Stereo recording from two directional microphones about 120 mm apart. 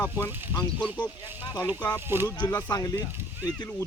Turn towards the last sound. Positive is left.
turn(degrees=30)  # may be behind; listen again after turning